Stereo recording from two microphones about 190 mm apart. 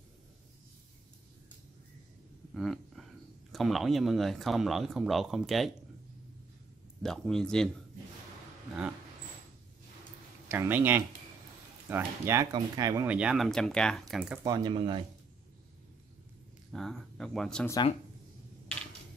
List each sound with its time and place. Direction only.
2.5 s a sound: centre (ahead or behind)
3.5 s speech: centre (ahead or behind)
7.0 s speech: 5° left (ahead or behind)
10.5 s speech: 10° right (ahead or behind)
14.4 s speech: 20° right (ahead or behind)
16.7 s speech: centre (ahead or behind)